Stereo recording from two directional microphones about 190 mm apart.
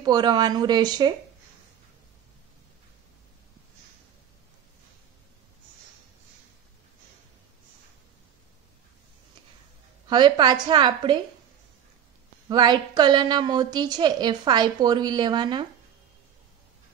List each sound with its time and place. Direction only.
0.0 s a woman's voice: 20° right (ahead or behind)
10.0 s a woman's voice: 25° right (ahead or behind)
12.4 s a woman's voice: 20° right (ahead or behind)